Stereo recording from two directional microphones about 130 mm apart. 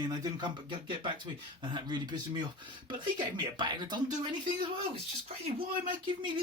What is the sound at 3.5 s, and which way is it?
Speech, 35° right (ahead or behind).